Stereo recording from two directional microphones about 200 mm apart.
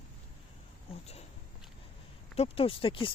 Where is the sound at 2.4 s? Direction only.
30° left (ahead or behind).